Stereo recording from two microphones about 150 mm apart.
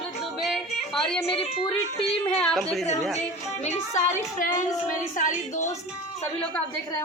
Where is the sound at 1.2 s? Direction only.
40° left (ahead or behind).